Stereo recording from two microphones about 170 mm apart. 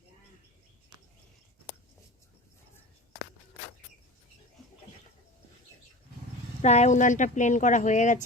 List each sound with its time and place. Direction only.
6.6 s speech: 40° left (ahead or behind)